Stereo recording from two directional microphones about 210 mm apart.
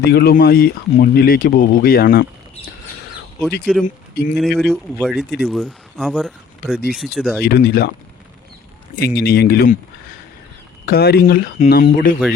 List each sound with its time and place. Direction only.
0.0 s speech: 50° left (ahead or behind)
3.7 s speech: 5° right (ahead or behind)
7.4 s speech: 50° left (ahead or behind)
9.0 s speech: 50° left (ahead or behind)
10.8 s speech: 50° left (ahead or behind)